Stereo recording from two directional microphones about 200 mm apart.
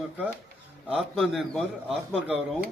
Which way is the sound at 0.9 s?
Centre (ahead or behind).